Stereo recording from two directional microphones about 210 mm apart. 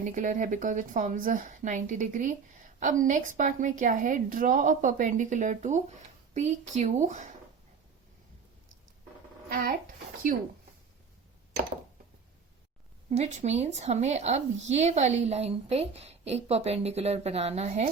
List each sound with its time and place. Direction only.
0.0 s speech: 35° right (ahead or behind)
9.5 s a sound: 45° right (ahead or behind)
13.1 s speech: 35° right (ahead or behind)